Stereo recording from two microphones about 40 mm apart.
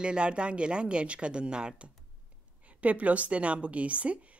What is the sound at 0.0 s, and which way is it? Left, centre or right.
Speech, right.